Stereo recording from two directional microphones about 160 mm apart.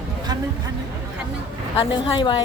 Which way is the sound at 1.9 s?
30° left (ahead or behind).